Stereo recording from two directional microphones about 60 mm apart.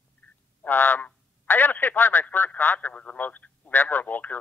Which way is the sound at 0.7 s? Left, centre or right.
Left.